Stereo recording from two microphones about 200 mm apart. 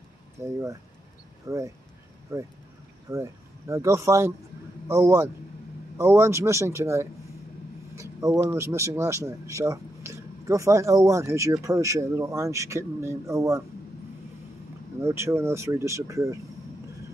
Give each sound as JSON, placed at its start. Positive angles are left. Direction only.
{"t": 0.4, "sound": "a man's voice", "side_deg": -15}
{"t": 15.0, "sound": "a man's voice", "side_deg": -15}